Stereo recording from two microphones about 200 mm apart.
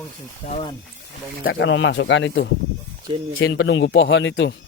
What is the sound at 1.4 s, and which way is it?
Speech, 60° left (ahead or behind).